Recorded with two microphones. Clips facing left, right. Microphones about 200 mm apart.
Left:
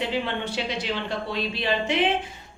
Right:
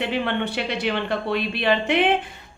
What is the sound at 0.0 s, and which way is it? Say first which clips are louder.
Speech: right 3 dB; 60° right (ahead or behind).